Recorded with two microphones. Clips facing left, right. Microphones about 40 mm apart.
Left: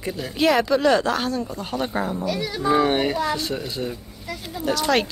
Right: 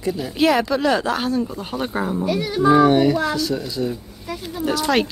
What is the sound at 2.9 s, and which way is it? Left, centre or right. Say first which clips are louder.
A child's voice: right 5 dB; left.